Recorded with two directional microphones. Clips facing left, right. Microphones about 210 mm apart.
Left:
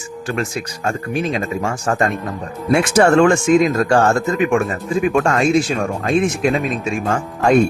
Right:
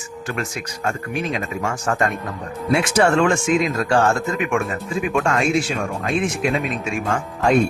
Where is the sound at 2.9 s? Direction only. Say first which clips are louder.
Left 5 dB; 45° left (ahead or behind).